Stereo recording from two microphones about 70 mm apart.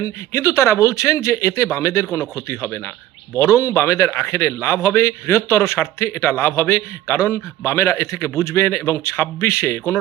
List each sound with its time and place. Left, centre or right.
0.0 s a man's voice: left